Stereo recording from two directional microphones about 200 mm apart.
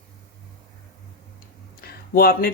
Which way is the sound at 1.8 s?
50° left (ahead or behind).